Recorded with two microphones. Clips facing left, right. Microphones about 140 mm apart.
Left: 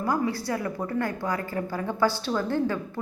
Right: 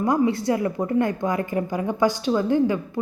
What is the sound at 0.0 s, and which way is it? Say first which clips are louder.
A woman's voice: right 6 dB; 25° right (ahead or behind).